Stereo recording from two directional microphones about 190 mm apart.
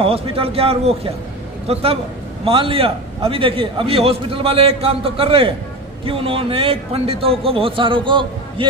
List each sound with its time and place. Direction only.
0.0 s a man's voice: 30° right (ahead or behind)